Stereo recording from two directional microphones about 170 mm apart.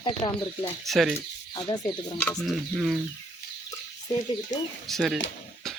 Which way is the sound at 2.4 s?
Centre (ahead or behind).